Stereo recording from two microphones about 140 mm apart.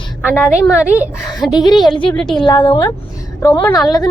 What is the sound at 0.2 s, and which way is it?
Speech, 15° left (ahead or behind).